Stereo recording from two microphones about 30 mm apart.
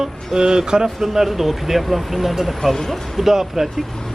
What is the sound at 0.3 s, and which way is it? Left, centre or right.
Speech, right.